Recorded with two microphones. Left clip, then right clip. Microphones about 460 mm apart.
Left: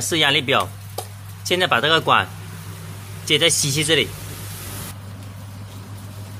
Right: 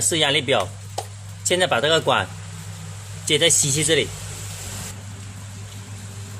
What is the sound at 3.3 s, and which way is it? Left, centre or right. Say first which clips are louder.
Speech: left 1 dB; right.